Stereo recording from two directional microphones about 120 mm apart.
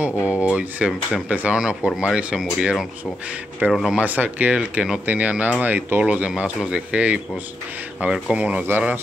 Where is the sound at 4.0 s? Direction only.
15° right (ahead or behind).